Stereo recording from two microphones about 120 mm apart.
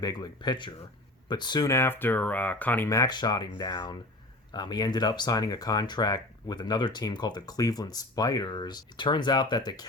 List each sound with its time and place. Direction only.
0.0 s speech: 35° left (ahead or behind)
1.7 s speech: 20° left (ahead or behind)
2.9 s speech: 35° left (ahead or behind)